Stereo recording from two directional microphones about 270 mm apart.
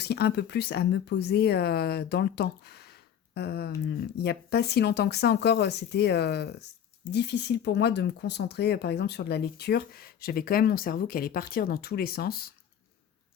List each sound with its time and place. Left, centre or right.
0.0 s speech: left